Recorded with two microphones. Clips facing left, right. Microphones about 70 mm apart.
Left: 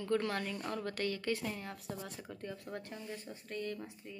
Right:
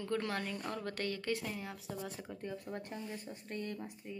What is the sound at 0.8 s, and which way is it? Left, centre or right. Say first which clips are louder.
Speech: left 2 dB; right.